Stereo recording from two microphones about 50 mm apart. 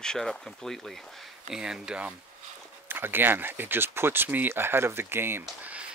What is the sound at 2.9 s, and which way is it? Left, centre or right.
Speech, right.